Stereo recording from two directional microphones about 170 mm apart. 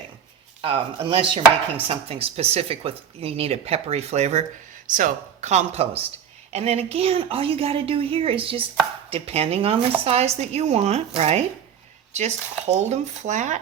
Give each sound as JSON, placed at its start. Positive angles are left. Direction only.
{"t": 0.6, "sound": "speech", "side_deg": -30}